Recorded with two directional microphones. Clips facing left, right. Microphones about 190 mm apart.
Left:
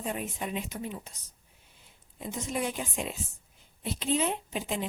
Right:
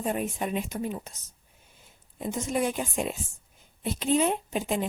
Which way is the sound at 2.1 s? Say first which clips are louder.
Right 5 dB; 50° right (ahead or behind).